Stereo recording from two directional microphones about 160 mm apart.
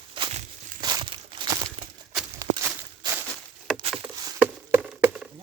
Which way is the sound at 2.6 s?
20° right (ahead or behind).